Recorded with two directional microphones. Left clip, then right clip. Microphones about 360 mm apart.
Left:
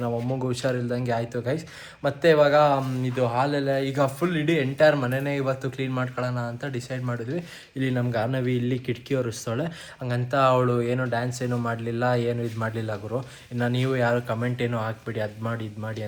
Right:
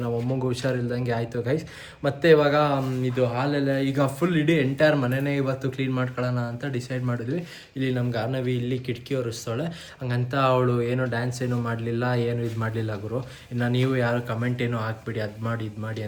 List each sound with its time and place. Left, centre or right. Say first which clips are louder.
0.0 s speech: even; centre
7.8 s speech: left 1 dB; centre
10.0 s speech: left 2 dB; centre